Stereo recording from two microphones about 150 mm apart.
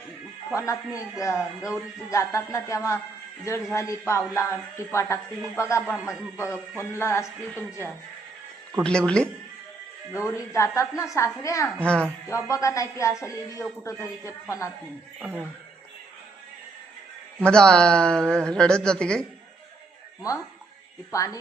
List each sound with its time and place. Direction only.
0.5 s speech: 20° left (ahead or behind)
10.3 s speech: 20° left (ahead or behind)
11.9 s speech: 5° left (ahead or behind)
12.3 s speech: 20° left (ahead or behind)
15.2 s speech: 10° right (ahead or behind)
17.4 s a woman's voice: 5° left (ahead or behind)
21.1 s speech: 20° left (ahead or behind)